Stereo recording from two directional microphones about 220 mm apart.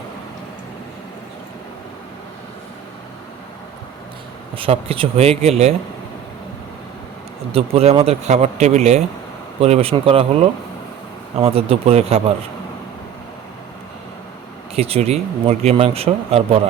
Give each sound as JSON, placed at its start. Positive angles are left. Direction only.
{"t": 4.5, "sound": "speech", "side_deg": -25}
{"t": 7.5, "sound": "speech", "side_deg": -25}
{"t": 11.3, "sound": "speech", "side_deg": -25}
{"t": 14.8, "sound": "speech", "side_deg": -25}